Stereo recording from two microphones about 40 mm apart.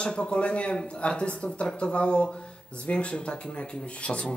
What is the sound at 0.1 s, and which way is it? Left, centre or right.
Speech, left.